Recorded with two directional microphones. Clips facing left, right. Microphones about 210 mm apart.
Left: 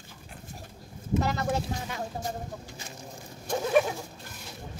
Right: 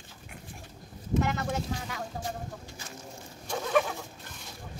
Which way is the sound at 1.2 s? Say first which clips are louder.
Left 2 dB; 35° left (ahead or behind).